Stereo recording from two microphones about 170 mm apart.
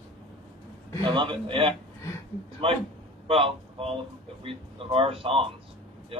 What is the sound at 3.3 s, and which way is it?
A man's voice, 35° right (ahead or behind).